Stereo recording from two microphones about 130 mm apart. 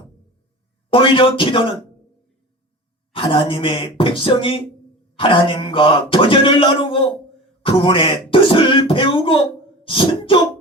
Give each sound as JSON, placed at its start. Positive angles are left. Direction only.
{"t": 0.9, "sound": "speech", "side_deg": 40}
{"t": 3.1, "sound": "speech", "side_deg": 40}
{"t": 9.8, "sound": "cough", "side_deg": 40}